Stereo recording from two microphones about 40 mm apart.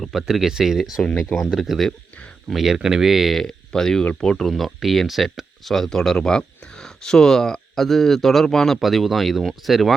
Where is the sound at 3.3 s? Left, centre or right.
Centre.